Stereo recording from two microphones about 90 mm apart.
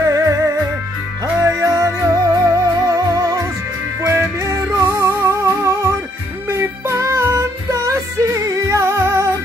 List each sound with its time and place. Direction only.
0.0 s music: 40° right (ahead or behind)